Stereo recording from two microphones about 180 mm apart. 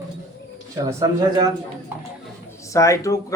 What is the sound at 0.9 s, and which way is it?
Speech, 15° right (ahead or behind).